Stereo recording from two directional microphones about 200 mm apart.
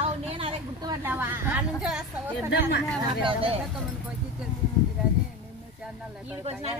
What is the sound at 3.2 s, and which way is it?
Speech, 25° right (ahead or behind).